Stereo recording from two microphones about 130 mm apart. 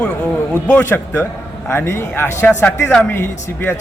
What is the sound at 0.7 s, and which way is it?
A man's voice, 20° left (ahead or behind).